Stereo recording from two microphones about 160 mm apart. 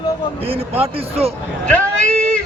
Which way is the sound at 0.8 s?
40° right (ahead or behind).